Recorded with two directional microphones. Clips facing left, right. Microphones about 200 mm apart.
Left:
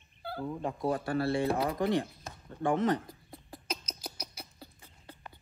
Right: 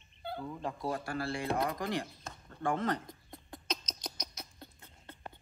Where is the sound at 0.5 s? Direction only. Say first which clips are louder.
Left 6 dB; 15° left (ahead or behind).